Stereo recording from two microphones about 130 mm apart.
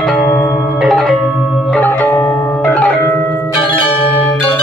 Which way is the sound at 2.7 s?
10° left (ahead or behind).